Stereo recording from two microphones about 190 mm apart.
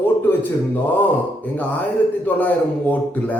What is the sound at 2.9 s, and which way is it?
Speech, 10° left (ahead or behind).